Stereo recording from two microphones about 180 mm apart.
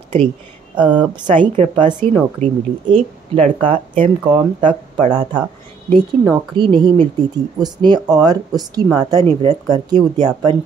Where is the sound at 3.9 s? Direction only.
30° right (ahead or behind).